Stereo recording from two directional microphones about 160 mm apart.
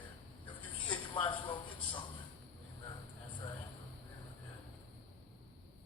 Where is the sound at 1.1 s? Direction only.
30° left (ahead or behind).